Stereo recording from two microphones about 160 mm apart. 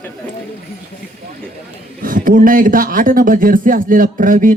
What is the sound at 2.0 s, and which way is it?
A man's voice, 60° right (ahead or behind).